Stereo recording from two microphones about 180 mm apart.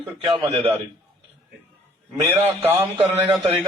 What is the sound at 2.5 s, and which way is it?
Speech, 10° right (ahead or behind).